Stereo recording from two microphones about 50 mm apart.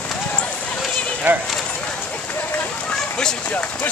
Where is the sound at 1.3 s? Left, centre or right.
Right.